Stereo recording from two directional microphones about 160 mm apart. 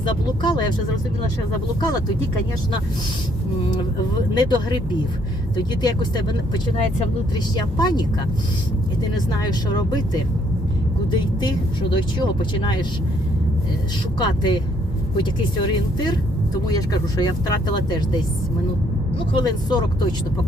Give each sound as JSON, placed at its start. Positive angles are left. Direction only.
{"t": 0.0, "sound": "speech", "side_deg": 30}
{"t": 4.4, "sound": "speech", "side_deg": 30}
{"t": 5.8, "sound": "speech", "side_deg": 25}
{"t": 9.1, "sound": "speech", "side_deg": 25}
{"t": 14.2, "sound": "speech", "side_deg": 30}
{"t": 16.6, "sound": "speech", "side_deg": 25}
{"t": 19.3, "sound": "speech", "side_deg": 25}